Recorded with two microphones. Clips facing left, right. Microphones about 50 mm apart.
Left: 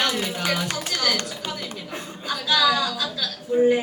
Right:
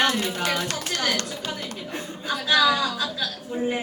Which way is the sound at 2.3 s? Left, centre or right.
Centre.